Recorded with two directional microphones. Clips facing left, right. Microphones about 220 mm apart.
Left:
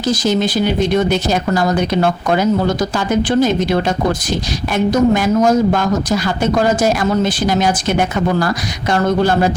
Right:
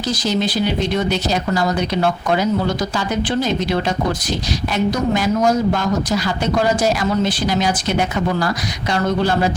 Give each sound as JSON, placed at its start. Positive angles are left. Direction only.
{"t": 0.1, "sound": "speech", "side_deg": 50}